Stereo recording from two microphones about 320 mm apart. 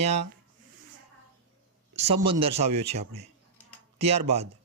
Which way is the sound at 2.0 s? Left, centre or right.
Centre.